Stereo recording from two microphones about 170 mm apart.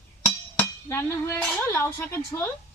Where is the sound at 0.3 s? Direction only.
10° left (ahead or behind).